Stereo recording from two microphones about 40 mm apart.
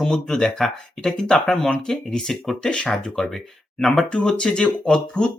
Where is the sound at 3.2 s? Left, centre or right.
Centre.